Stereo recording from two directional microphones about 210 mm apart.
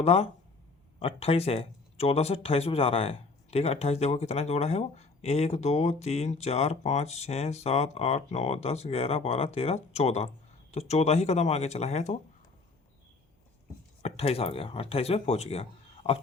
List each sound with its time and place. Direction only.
0.0 s speech: 30° left (ahead or behind)
14.0 s speech: 30° left (ahead or behind)